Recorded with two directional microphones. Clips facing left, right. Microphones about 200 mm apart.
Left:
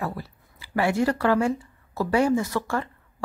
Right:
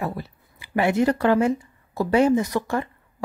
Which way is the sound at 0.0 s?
20° right (ahead or behind).